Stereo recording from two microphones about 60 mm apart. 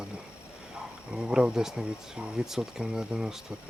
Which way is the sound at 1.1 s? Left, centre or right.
Centre.